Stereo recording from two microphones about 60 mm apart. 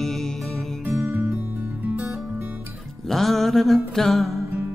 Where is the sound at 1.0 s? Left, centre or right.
Right.